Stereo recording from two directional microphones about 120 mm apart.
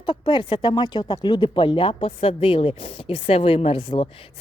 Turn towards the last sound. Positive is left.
turn(degrees=45)  # may be behind; listen again after turning